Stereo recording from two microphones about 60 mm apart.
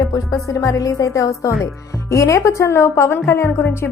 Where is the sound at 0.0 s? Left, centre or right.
Left.